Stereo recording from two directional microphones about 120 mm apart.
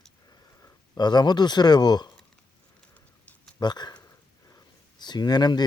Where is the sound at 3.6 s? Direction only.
35° left (ahead or behind).